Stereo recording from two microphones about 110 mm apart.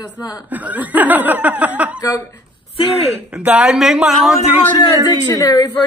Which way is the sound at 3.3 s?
10° right (ahead or behind).